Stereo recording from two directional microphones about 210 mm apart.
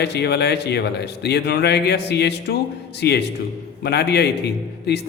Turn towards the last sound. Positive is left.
turn(degrees=50)  # may be behind; listen again after turning